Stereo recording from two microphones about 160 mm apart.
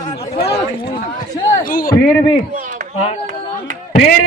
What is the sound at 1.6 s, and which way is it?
Speech, 65° left (ahead or behind).